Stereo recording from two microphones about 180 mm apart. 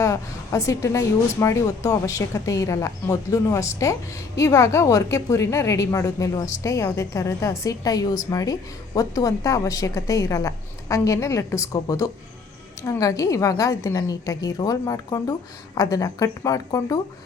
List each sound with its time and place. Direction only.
0.0 s a woman's voice: 15° left (ahead or behind)